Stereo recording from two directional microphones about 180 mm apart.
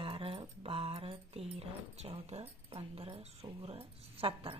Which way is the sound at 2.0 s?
35° right (ahead or behind).